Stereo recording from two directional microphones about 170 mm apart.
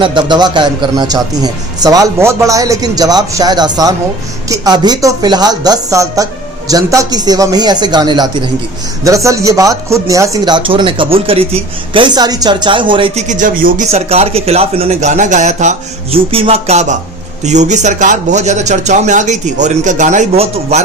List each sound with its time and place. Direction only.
0.0 s speech: 30° right (ahead or behind)
13.2 s a man's voice: 50° right (ahead or behind)
13.9 s a man's voice: 35° right (ahead or behind)